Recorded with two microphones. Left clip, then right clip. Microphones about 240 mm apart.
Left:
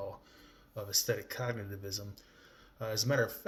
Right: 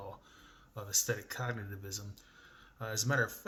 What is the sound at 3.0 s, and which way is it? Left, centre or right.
Speech, centre.